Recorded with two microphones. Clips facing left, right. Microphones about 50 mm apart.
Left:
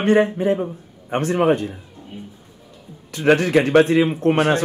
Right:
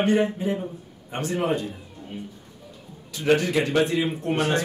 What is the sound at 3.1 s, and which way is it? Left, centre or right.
Speech, left.